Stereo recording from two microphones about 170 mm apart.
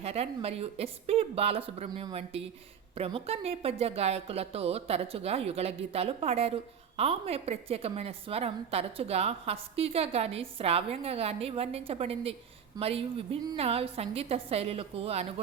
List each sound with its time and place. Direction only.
0.0 s a woman's voice: 35° right (ahead or behind)